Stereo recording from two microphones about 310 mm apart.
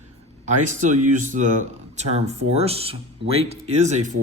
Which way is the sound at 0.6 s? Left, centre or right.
Right.